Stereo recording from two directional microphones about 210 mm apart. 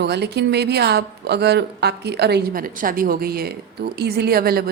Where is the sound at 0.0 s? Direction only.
50° right (ahead or behind).